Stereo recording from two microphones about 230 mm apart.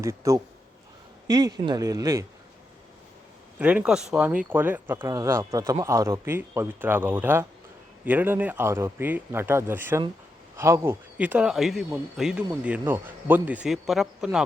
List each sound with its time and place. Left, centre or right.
0.0 s speech: centre
3.6 s speech: centre